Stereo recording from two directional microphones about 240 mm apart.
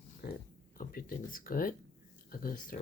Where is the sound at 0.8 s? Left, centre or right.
Left.